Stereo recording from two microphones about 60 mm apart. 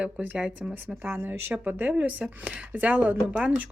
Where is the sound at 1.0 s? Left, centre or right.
Right.